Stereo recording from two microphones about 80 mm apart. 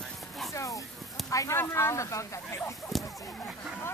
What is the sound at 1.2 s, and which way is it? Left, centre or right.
Speech, left.